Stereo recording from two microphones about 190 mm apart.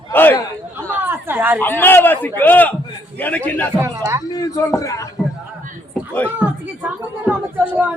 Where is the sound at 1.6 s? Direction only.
10° left (ahead or behind).